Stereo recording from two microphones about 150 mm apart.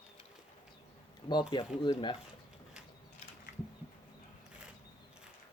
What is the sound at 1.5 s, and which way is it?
Speech, 30° left (ahead or behind).